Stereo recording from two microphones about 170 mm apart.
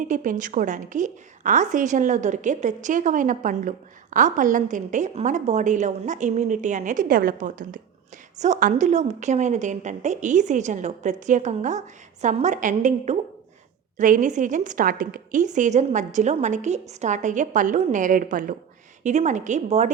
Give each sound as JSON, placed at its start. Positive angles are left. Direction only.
{"t": 0.0, "sound": "a woman's voice", "side_deg": -50}